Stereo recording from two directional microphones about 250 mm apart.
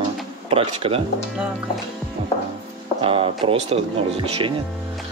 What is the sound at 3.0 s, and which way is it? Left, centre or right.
Speech, right.